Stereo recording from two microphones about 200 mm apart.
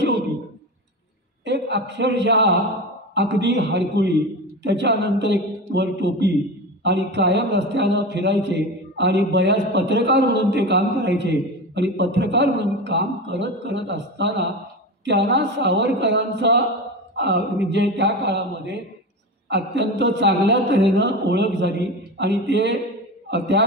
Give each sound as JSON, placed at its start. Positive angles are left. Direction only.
{"t": 1.4, "sound": "a man's voice", "side_deg": -60}